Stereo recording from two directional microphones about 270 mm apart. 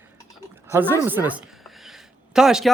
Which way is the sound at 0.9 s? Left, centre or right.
Centre.